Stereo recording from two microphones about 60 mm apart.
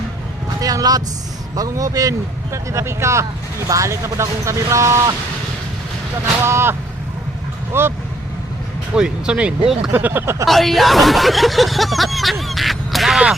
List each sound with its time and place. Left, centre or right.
0.6 s vehicle: right
1.5 s speech: right
6.4 s speech: right
9.0 s speech: centre
9.9 s speech: right
10.4 s speech: centre